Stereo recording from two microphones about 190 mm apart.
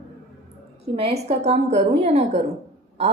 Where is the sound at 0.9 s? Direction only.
35° right (ahead or behind).